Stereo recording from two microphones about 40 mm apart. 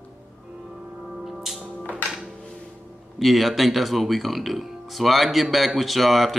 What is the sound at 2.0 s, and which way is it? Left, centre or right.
Music, centre.